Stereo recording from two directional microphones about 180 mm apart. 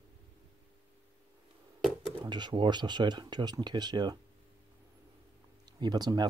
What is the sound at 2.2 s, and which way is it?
Speech, 25° right (ahead or behind).